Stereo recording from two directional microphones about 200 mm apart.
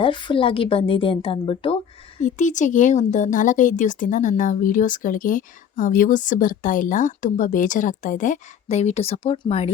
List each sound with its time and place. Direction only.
0.0 s speech: 25° left (ahead or behind)
2.2 s speech: 40° left (ahead or behind)